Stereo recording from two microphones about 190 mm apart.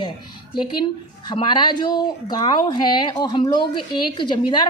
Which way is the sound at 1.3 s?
25° left (ahead or behind).